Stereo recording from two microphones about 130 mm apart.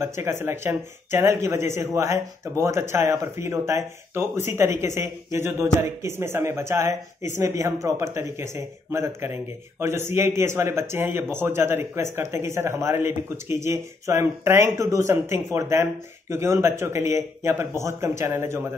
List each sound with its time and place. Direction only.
0.0 s a man's voice: 20° right (ahead or behind)